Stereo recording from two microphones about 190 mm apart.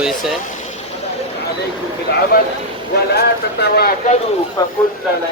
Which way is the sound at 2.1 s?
60° left (ahead or behind).